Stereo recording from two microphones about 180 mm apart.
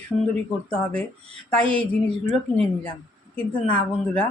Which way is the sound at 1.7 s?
5° left (ahead or behind).